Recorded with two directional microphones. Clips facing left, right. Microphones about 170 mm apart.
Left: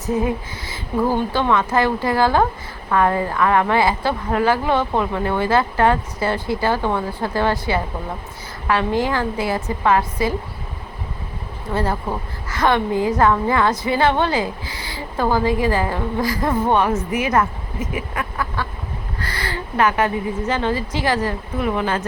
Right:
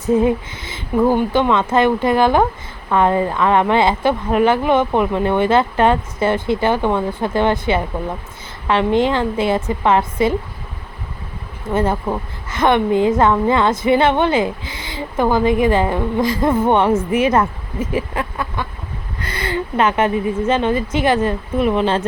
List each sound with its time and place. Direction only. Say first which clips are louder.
0.0 s a woman's voice: right 6 dB; 25° right (ahead or behind)
11.7 s a woman's voice: right 4 dB; 20° right (ahead or behind)